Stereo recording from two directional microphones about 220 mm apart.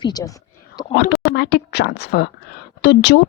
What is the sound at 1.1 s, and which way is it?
Speech, 50° left (ahead or behind).